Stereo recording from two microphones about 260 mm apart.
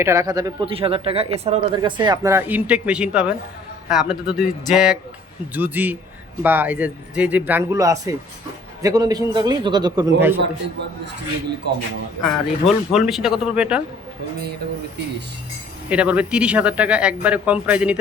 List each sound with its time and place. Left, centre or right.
0.0 s speech: centre
10.3 s a man's voice: right
12.2 s speech: centre
15.9 s speech: centre